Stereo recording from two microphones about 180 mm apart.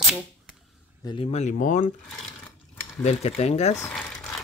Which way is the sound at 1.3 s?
40° left (ahead or behind).